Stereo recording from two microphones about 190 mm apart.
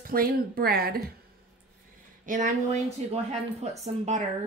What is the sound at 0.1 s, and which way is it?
Speech, 50° right (ahead or behind).